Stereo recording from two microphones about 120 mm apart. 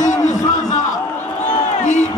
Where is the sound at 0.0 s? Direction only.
90° left.